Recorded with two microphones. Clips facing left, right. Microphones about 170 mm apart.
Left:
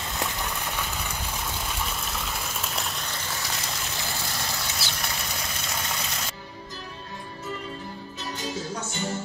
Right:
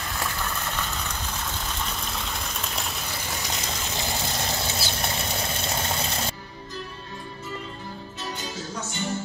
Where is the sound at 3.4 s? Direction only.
20° right (ahead or behind).